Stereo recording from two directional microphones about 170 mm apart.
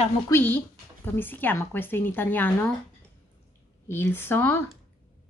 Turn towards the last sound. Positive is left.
turn(degrees=10)  # may be behind; listen again after turning